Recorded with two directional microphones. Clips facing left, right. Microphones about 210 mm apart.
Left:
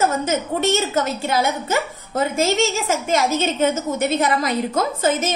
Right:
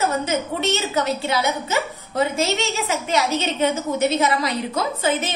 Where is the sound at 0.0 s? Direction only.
45° left (ahead or behind).